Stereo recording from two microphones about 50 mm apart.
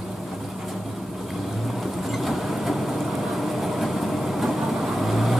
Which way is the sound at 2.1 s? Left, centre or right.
Centre.